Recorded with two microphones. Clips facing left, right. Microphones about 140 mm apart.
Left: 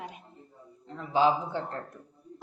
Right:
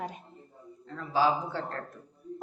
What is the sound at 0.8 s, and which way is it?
Speech, 20° left (ahead or behind).